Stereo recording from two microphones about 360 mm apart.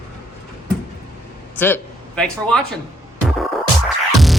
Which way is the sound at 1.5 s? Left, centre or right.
Centre.